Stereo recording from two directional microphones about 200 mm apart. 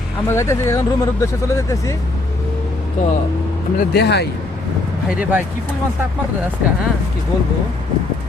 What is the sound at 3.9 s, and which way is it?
Speech, 55° left (ahead or behind).